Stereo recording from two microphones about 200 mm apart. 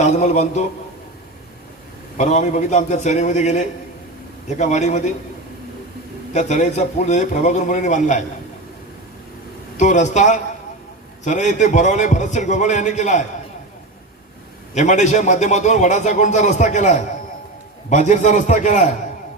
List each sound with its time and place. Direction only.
0.0 s speech: 35° left (ahead or behind)
2.1 s speech: 35° left (ahead or behind)
6.3 s speech: 35° left (ahead or behind)
9.7 s speech: 35° left (ahead or behind)
14.8 s speech: 35° left (ahead or behind)